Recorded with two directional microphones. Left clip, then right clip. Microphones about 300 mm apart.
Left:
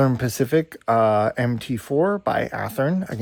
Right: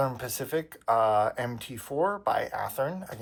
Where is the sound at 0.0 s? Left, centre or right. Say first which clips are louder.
Left 8 dB; left.